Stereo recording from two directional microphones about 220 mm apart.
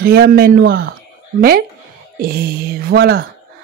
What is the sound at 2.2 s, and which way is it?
Speech, 45° right (ahead or behind).